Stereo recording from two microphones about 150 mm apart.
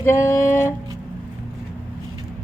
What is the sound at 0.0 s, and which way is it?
Music, 15° left (ahead or behind).